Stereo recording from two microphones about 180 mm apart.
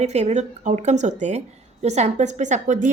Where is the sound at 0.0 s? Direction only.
40° right (ahead or behind).